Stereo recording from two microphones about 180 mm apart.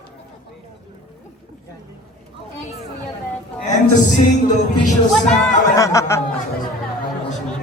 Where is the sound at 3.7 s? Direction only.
40° left (ahead or behind).